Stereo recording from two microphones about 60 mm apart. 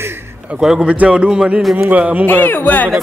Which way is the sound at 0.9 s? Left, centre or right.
Centre.